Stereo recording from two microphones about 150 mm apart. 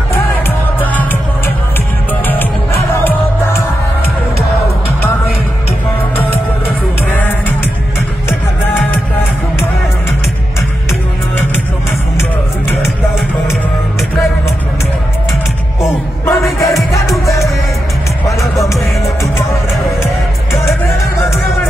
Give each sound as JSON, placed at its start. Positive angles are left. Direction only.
{"t": 2.9, "sound": "music", "side_deg": 15}
{"t": 7.2, "sound": "music", "side_deg": 10}
{"t": 15.8, "sound": "music", "side_deg": 20}